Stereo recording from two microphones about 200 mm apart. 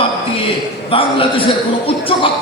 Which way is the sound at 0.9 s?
25° left (ahead or behind).